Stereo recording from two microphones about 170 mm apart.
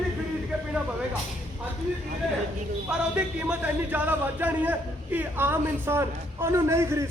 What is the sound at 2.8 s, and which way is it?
Speech, 5° right (ahead or behind).